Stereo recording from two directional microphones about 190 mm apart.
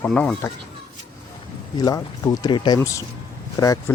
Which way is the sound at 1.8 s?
20° left (ahead or behind).